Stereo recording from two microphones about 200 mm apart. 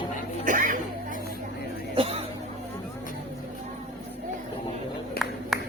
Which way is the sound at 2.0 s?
30° right (ahead or behind).